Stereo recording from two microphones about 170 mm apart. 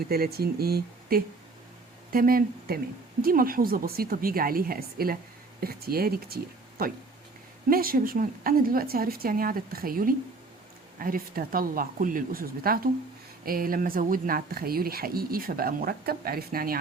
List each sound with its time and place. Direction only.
0.1 s speech: 65° right (ahead or behind)